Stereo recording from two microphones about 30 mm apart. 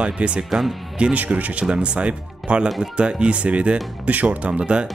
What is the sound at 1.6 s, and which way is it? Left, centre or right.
Speech, right.